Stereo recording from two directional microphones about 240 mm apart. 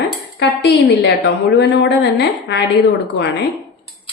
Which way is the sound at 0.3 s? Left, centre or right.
Left.